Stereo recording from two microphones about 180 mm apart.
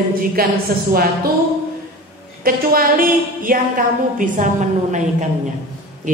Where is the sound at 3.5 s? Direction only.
50° right (ahead or behind).